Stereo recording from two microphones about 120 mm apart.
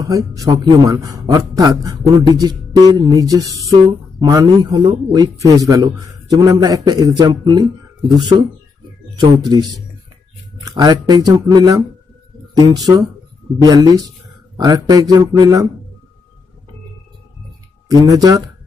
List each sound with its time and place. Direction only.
0.0 s a man's voice: 30° right (ahead or behind)
17.8 s a man's voice: 30° right (ahead or behind)